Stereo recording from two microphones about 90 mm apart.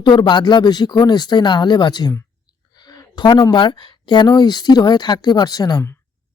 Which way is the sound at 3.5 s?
60° left (ahead or behind).